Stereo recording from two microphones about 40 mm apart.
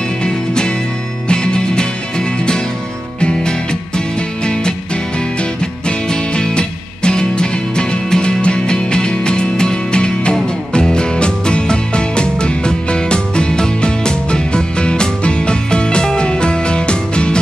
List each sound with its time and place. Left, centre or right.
0.2 s music: left
5.4 s music: left